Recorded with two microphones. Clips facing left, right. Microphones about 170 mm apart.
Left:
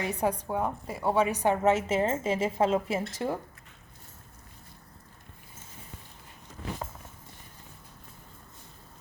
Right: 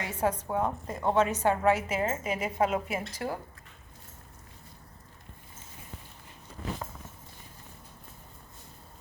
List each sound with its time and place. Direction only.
0.0 s a woman's voice: 15° left (ahead or behind)